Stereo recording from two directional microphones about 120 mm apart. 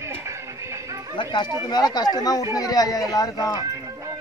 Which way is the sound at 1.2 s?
40° left (ahead or behind).